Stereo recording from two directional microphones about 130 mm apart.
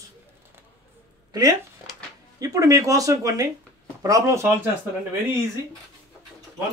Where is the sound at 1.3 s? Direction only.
30° right (ahead or behind).